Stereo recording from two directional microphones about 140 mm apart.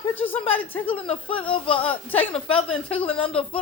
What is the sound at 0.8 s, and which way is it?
Speech, 40° left (ahead or behind).